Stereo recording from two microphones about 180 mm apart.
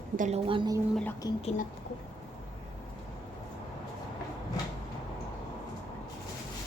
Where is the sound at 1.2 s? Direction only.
20° left (ahead or behind).